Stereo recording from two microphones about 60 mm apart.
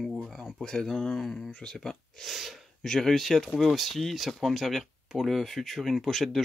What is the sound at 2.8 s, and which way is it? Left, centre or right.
Speech, centre.